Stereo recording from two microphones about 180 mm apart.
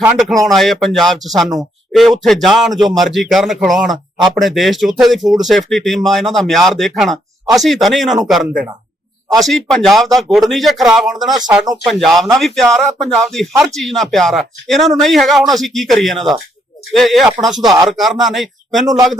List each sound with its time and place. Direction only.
0.0 s speech: centre (ahead or behind)
11.3 s speech: 20° right (ahead or behind)
11.9 s speech: centre (ahead or behind)